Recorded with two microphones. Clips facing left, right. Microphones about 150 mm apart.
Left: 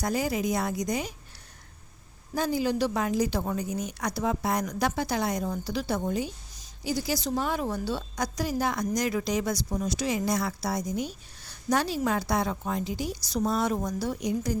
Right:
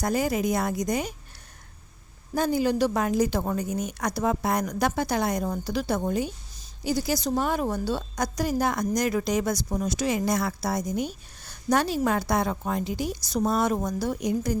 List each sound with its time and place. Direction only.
0.0 s a woman's voice: 50° right (ahead or behind)
2.3 s a woman's voice: 50° right (ahead or behind)